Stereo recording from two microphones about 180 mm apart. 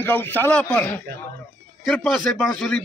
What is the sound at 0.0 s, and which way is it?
A man's voice, 10° left (ahead or behind).